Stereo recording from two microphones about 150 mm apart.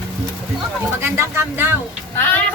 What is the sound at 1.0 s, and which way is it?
Speech, 15° right (ahead or behind).